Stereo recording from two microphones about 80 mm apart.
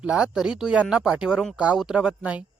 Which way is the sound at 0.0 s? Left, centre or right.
Centre.